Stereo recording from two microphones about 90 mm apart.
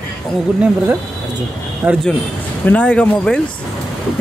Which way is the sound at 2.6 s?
15° left (ahead or behind).